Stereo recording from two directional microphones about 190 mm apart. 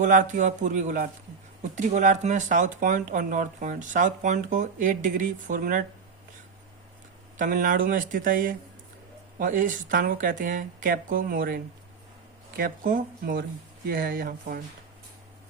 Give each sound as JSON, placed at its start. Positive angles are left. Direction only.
{"t": 0.0, "sound": "speech", "side_deg": -40}
{"t": 7.3, "sound": "speech", "side_deg": -45}